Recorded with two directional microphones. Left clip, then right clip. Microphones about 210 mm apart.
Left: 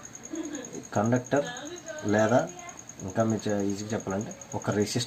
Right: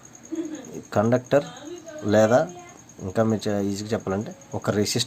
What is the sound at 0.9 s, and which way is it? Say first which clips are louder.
Speech: right 6 dB; 40° right (ahead or behind).